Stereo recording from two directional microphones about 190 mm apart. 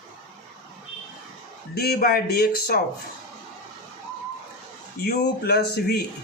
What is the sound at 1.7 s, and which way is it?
Speech, 55° left (ahead or behind).